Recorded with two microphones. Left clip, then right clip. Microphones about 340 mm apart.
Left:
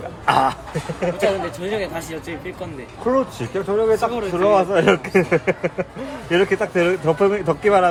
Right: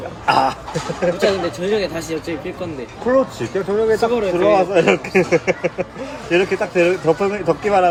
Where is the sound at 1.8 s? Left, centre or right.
Left.